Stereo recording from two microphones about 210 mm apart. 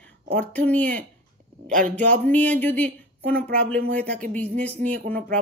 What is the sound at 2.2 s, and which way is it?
A woman's voice, 5° left (ahead or behind).